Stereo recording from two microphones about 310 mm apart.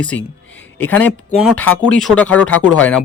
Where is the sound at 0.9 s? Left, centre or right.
Centre.